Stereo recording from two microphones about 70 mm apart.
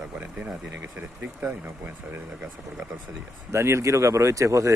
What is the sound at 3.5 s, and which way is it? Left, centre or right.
Speech, right.